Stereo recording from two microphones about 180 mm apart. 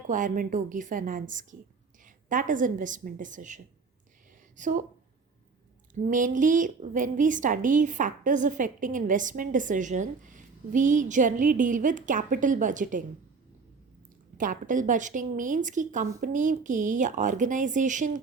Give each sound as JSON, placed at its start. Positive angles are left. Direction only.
{"t": 0.1, "sound": "a woman's voice", "side_deg": -45}
{"t": 5.9, "sound": "a woman's voice", "side_deg": -45}
{"t": 14.3, "sound": "a woman's voice", "side_deg": -50}